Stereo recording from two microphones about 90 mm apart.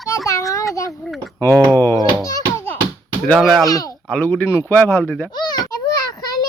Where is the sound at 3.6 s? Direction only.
45° left (ahead or behind).